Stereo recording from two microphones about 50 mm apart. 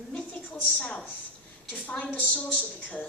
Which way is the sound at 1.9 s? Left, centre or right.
Left.